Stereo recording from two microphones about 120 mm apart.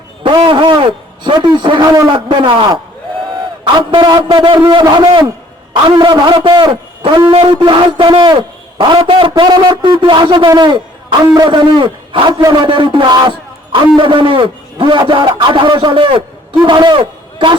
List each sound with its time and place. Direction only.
0.2 s a man's voice: 45° right (ahead or behind)
3.9 s a man's voice: 40° right (ahead or behind)